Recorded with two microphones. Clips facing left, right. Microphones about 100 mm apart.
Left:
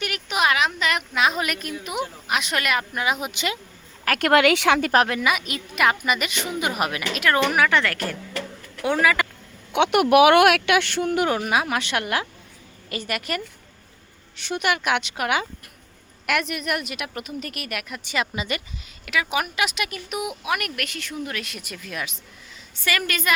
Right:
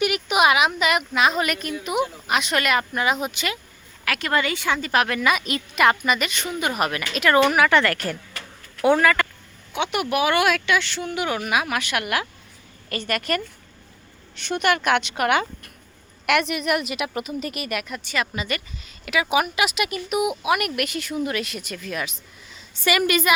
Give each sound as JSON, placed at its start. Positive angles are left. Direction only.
{"t": 0.0, "sound": "a sound", "side_deg": -15}
{"t": 1.8, "sound": "speech", "side_deg": 0}
{"t": 4.2, "sound": "speech", "side_deg": 75}
{"t": 5.2, "sound": "speech", "side_deg": 5}
{"t": 9.7, "sound": "speech", "side_deg": 60}
{"t": 11.3, "sound": "speech", "side_deg": 30}
{"t": 12.9, "sound": "a woman's voice", "side_deg": 10}
{"t": 18.0, "sound": "speech", "side_deg": 20}
{"t": 19.0, "sound": "speech", "side_deg": -5}
{"t": 22.9, "sound": "a woman's voice", "side_deg": -15}